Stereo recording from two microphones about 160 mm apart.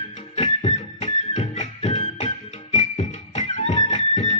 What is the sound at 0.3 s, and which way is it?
Music, 45° left (ahead or behind).